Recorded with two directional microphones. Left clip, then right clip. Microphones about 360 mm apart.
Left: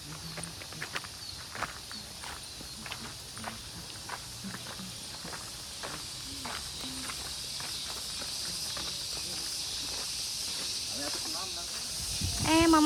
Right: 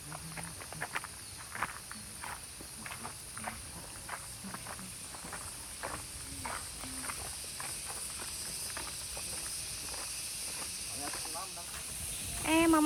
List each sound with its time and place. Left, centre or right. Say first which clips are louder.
12.4 s snake: left 3 dB; centre